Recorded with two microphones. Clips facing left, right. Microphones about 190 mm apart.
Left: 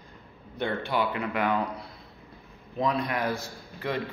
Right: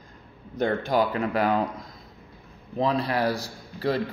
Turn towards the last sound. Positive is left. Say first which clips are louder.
# right 6 dB
turn(degrees=-35)  # may be behind; listen again after turning